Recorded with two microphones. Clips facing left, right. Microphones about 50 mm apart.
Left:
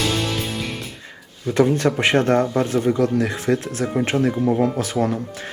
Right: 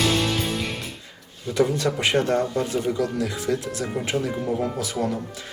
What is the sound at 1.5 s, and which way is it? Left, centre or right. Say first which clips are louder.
A man's voice: left 4 dB; left.